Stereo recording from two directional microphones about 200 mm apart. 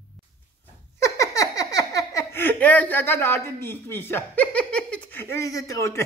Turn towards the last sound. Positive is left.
turn(degrees=15)  # may be behind; listen again after turning